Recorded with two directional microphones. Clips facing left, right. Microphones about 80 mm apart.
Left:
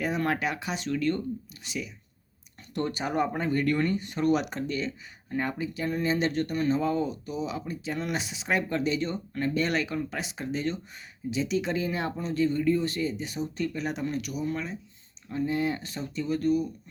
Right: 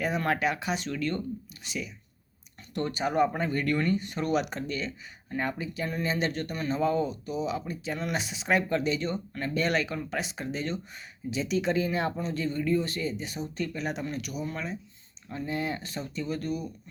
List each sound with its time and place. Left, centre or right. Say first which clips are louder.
0.0 s speech: even; centre
3.0 s speech: right 4 dB; centre
6.7 s speech: right 3 dB; centre